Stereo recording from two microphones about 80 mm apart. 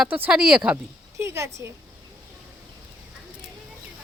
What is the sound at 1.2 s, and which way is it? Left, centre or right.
Speech, right.